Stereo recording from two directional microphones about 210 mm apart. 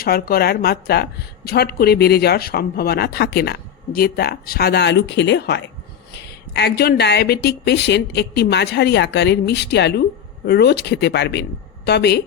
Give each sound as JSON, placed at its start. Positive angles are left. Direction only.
{"t": 0.0, "sound": "a woman's voice", "side_deg": 45}